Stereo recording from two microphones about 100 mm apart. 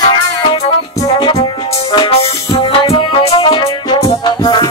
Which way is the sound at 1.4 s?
55° left (ahead or behind).